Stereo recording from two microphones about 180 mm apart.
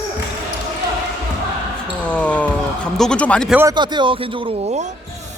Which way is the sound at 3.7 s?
25° right (ahead or behind).